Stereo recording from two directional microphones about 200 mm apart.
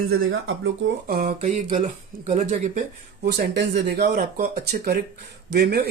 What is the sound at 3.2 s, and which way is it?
Speech, 60° right (ahead or behind).